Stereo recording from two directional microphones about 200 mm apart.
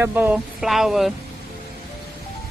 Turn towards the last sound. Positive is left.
turn(degrees=0)  # may be behind; listen again after turning